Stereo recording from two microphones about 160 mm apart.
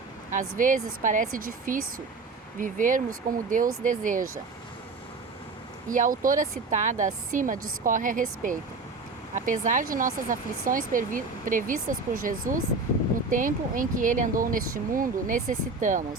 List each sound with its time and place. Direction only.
0.3 s speech: 55° right (ahead or behind)
5.9 s speech: 55° right (ahead or behind)